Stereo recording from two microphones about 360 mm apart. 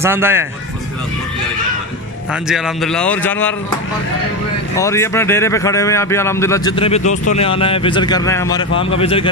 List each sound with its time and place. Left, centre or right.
0.0 s speech: centre
2.4 s a man's voice: centre
4.7 s a man's voice: centre